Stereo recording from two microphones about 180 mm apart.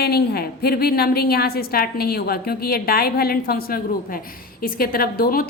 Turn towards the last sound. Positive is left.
turn(degrees=55)  # may be behind; listen again after turning